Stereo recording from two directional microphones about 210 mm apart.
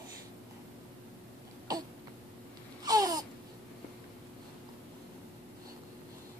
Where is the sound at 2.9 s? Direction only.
20° right (ahead or behind).